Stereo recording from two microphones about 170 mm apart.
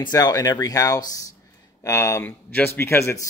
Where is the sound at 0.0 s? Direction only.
20° left (ahead or behind).